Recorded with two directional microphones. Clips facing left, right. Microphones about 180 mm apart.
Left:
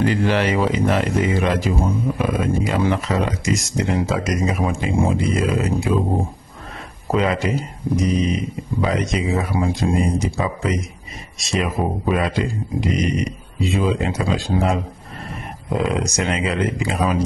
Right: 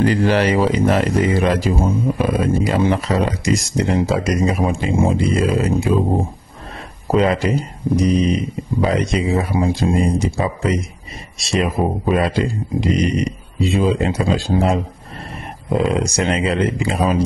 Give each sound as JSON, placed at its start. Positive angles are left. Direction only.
{"t": 0.0, "sound": "speech", "side_deg": -40}
{"t": 7.1, "sound": "speech", "side_deg": -35}
{"t": 16.0, "sound": "speech", "side_deg": -30}